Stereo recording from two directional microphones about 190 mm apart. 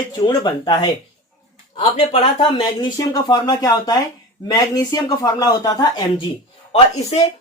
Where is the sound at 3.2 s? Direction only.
20° left (ahead or behind).